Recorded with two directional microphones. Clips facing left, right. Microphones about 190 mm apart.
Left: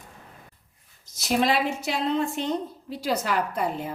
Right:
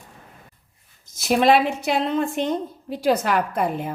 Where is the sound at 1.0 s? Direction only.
55° right (ahead or behind).